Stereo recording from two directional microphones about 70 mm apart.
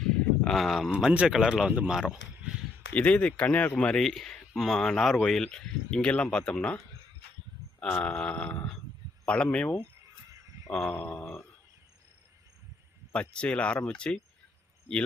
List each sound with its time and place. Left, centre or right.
0.0 s a sound: centre
0.9 s speech: centre
1.3 s speech: centre
2.9 s speech: left
7.8 s speech: centre
10.9 s speech: left
13.1 s speech: centre